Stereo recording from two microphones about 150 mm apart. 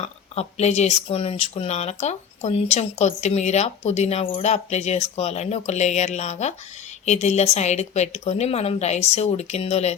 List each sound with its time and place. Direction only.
0.0 s speech: 45° left (ahead or behind)